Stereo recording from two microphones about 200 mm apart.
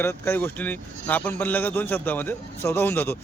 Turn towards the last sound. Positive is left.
turn(degrees=10)  # may be behind; listen again after turning